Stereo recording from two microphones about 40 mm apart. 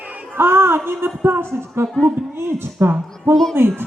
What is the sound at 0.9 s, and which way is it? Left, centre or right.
Speech, right.